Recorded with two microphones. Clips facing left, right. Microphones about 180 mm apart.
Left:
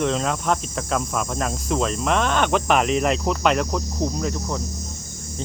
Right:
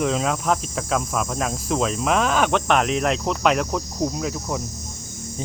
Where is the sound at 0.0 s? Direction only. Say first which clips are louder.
Even; 5° right (ahead or behind).